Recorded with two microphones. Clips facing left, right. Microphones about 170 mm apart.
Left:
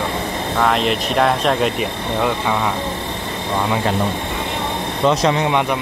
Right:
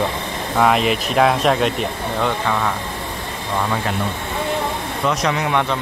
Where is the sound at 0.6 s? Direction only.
5° right (ahead or behind).